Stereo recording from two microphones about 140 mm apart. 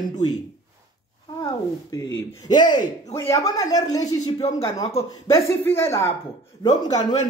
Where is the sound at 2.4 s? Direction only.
30° left (ahead or behind).